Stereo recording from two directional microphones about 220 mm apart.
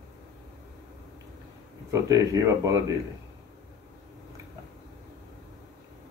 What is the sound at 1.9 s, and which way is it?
Speech, 15° right (ahead or behind).